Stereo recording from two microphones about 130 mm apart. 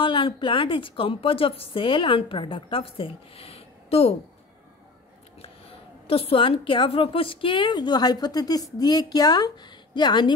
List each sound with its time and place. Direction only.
0.0 s a woman's voice: 40° left (ahead or behind)
5.4 s a woman's voice: 45° left (ahead or behind)